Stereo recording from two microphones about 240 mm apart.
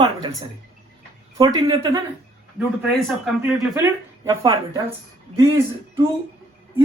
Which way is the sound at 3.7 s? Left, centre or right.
Centre.